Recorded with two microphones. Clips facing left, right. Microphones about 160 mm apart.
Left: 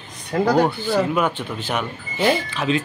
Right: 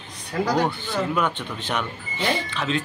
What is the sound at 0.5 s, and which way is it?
Speech, 35° left (ahead or behind).